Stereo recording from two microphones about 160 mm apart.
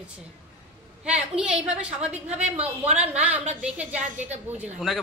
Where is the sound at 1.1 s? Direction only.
5° right (ahead or behind).